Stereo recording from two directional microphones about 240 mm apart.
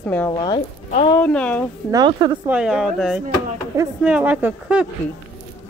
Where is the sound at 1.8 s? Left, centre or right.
Centre.